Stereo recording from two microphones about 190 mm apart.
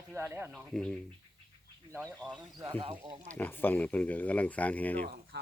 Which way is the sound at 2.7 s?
30° right (ahead or behind).